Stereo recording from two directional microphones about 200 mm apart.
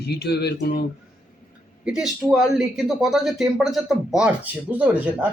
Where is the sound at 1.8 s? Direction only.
5° right (ahead or behind).